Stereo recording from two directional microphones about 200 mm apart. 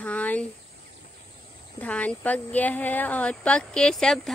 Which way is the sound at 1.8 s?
5° left (ahead or behind).